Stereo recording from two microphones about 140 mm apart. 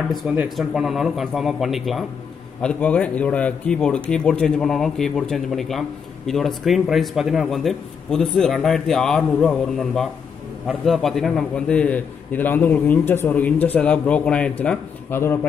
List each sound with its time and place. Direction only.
0.1 s a man's voice: centre (ahead or behind); by 15.3 s 15° left (ahead or behind)